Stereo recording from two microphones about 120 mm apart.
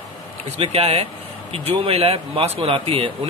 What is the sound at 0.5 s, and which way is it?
Speech, 55° right (ahead or behind).